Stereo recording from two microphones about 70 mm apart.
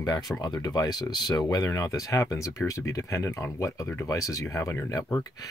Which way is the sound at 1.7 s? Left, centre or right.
Left.